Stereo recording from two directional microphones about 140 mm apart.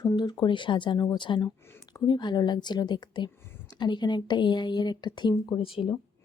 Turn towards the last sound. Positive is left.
turn(degrees=40)  # may be behind; listen again after turning